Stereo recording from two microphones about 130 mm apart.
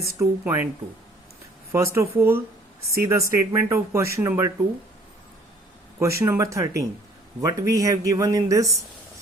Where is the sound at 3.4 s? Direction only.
20° right (ahead or behind).